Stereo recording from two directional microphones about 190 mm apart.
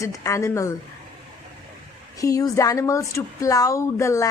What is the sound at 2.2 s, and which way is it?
A woman's voice, 20° left (ahead or behind).